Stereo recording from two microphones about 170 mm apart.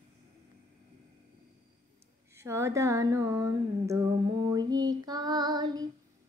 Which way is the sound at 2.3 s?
15° right (ahead or behind).